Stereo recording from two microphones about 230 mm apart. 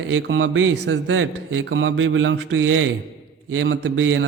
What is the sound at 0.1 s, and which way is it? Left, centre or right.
A man's voice, right.